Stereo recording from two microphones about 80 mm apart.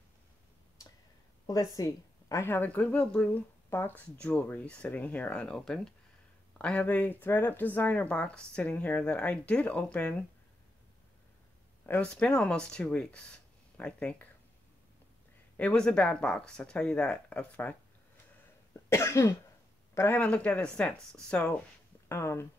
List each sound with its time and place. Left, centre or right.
1.5 s a woman's voice: left
2.4 s speech: left
11.8 s speech: centre
15.5 s speech: centre
18.7 s cough: left
20.1 s speech: centre
22.1 s speech: left